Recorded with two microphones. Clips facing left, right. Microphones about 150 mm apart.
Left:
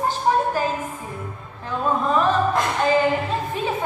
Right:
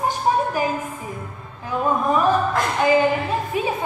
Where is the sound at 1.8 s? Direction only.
15° right (ahead or behind).